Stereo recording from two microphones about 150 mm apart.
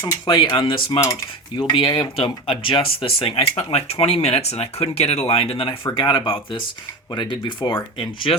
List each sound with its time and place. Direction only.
0.3 s speech: 30° left (ahead or behind)